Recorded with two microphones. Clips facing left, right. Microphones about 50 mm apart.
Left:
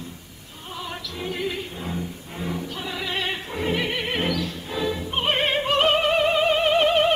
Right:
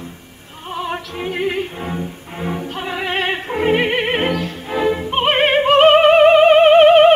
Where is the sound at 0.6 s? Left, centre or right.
Right.